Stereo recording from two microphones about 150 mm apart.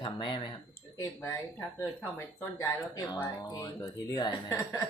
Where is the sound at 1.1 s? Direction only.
15° left (ahead or behind).